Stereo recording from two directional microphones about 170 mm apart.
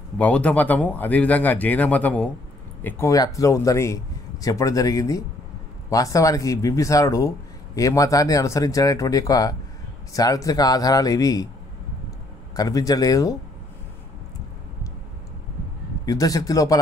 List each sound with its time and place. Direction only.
0.2 s speech: 10° left (ahead or behind)
12.5 s speech: 20° left (ahead or behind)
16.1 s speech: 20° left (ahead or behind)